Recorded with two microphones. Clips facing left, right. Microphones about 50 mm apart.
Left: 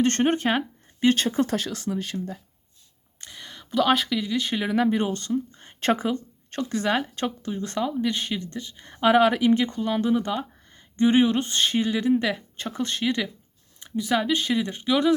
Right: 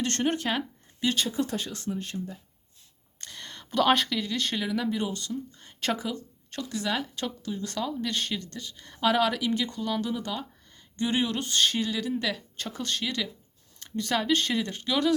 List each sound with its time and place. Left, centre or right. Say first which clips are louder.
0.0 s speech: left 6 dB; left
1.5 s speech: left 5 dB; left
3.2 s speech: left 1 dB; centre
4.7 s speech: left 6 dB; left
13.7 s speech: left 4 dB; centre